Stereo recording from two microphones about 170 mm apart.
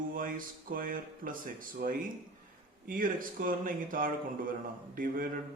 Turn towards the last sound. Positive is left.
turn(degrees=-55)  # may be behind; listen again after turning